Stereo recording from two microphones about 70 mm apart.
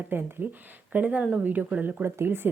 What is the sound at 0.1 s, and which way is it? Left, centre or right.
Speech, right.